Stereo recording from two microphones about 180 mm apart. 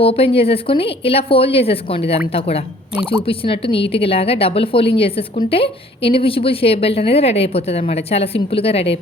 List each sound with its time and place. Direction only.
0.0 s a woman's voice: 30° left (ahead or behind)